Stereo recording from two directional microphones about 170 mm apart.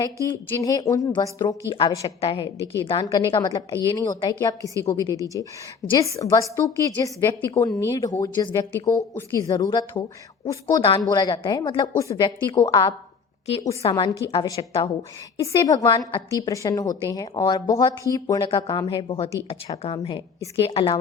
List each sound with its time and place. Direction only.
0.6 s a woman's voice: 20° left (ahead or behind)
13.9 s a woman's voice: 20° left (ahead or behind)